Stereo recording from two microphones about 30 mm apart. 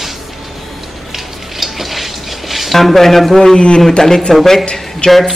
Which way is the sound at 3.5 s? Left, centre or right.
Left.